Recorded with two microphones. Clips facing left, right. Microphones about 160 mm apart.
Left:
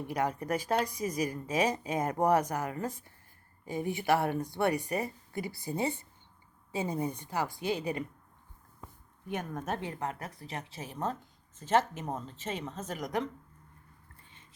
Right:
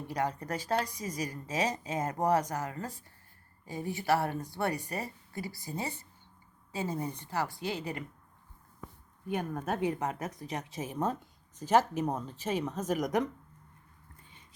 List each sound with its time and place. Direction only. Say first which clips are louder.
0.1 s a woman's voice: left 2 dB; 10° left (ahead or behind)
9.3 s speech: right 2 dB; 5° right (ahead or behind)
9.8 s speech: right 5 dB; 15° right (ahead or behind)